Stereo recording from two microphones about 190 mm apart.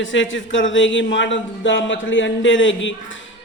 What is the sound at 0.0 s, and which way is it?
A man's voice, 75° left (ahead or behind).